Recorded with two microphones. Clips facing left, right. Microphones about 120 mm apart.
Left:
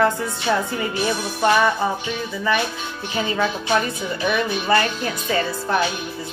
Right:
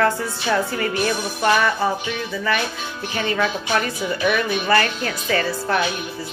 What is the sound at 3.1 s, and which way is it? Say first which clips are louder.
Speech: even; 20° left (ahead or behind).